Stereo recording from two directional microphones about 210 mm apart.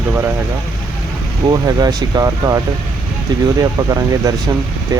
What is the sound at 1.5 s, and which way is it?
Speech, 20° right (ahead or behind).